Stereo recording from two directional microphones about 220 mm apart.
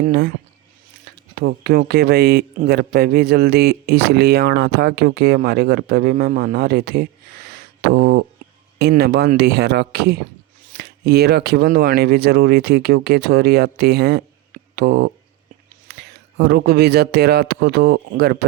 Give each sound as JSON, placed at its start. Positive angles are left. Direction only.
{"t": 0.0, "sound": "speech", "side_deg": -45}
{"t": 1.4, "sound": "speech", "side_deg": -45}